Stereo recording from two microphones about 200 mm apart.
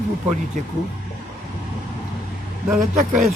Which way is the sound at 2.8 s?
40° right (ahead or behind).